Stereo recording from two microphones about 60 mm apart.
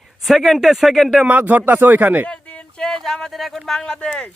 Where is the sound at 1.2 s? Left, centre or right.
Right.